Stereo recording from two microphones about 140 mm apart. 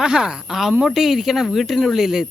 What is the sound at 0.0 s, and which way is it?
Speech, 5° right (ahead or behind).